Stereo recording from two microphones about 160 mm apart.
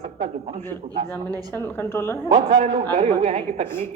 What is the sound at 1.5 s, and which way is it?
Speech, 15° left (ahead or behind).